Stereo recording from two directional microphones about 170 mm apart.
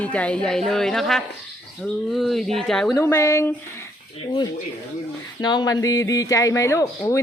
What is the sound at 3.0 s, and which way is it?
Speech, 15° left (ahead or behind).